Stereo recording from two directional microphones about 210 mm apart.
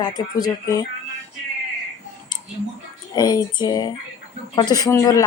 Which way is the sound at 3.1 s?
20° left (ahead or behind).